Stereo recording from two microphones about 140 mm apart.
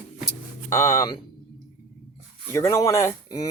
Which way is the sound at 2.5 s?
20° left (ahead or behind).